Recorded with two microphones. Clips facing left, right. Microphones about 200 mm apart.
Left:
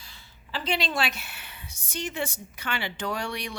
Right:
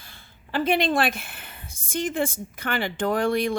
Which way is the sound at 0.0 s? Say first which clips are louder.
Right 2 dB; 55° right (ahead or behind).